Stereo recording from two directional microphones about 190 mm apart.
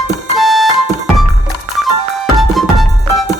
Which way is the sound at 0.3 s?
Centre (ahead or behind).